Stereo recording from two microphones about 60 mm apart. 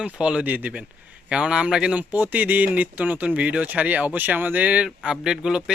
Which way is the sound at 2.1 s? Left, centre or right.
Right.